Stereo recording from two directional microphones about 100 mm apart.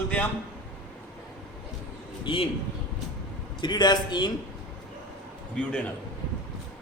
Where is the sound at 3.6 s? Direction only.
45° left (ahead or behind).